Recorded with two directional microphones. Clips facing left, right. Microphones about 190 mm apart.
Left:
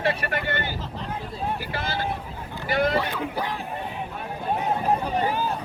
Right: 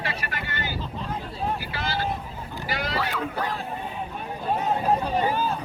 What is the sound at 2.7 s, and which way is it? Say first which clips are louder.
Sheep: left 8 dB; 55° left (ahead or behind).